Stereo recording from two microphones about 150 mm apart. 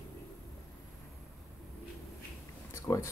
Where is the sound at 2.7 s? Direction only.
20° left (ahead or behind).